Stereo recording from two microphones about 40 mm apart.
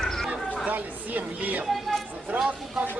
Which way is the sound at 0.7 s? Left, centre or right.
Right.